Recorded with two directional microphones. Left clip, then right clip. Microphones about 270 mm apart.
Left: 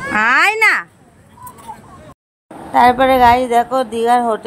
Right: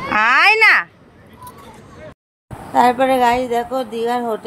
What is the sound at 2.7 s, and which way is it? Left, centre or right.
Speech, centre.